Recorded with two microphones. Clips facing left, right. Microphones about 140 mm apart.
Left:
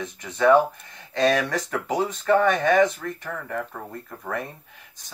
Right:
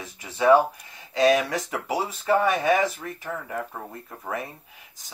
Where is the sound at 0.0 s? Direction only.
5° right (ahead or behind).